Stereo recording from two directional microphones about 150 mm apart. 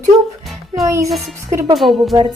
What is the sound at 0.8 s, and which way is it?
Speech, 20° right (ahead or behind).